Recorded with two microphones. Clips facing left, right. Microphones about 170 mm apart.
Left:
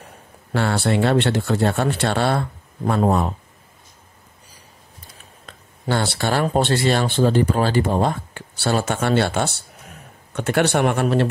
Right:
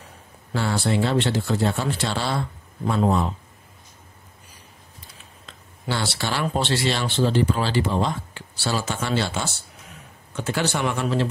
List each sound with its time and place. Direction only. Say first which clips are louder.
0.0 s speech: left 3 dB; 60° left (ahead or behind)
5.5 s speech: left 5 dB; 50° left (ahead or behind)